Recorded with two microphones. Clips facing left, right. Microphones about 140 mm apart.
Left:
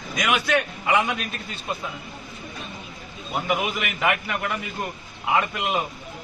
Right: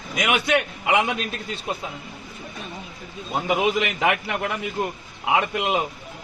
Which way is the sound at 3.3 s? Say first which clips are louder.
Right 4 dB; 30° right (ahead or behind).